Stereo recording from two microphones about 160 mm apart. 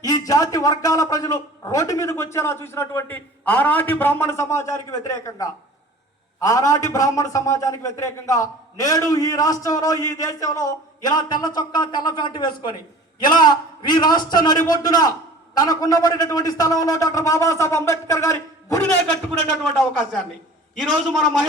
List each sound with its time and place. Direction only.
0.0 s a man's voice: 20° left (ahead or behind)
20.7 s a man's voice: centre (ahead or behind)